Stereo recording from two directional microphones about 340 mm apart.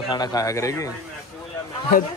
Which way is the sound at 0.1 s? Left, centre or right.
Centre.